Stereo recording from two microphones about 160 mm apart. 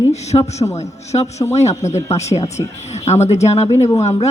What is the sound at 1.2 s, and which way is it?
Speech, 20° left (ahead or behind).